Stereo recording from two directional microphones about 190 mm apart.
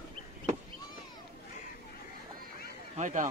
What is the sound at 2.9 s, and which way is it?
Speech, 40° right (ahead or behind).